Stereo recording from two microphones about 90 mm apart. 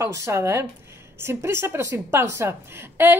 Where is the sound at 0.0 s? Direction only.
35° right (ahead or behind).